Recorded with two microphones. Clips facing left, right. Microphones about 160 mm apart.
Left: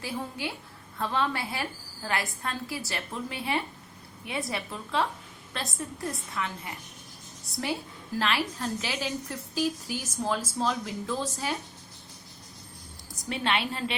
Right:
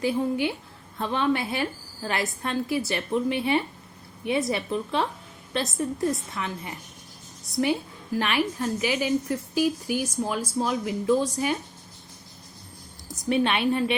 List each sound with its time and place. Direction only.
0.0 s a woman's voice: 20° right (ahead or behind)
13.2 s a woman's voice: 20° right (ahead or behind)